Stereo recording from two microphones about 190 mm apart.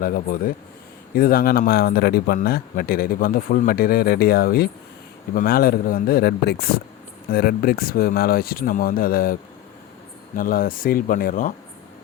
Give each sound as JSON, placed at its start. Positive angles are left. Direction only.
{"t": 0.0, "sound": "speech", "side_deg": 50}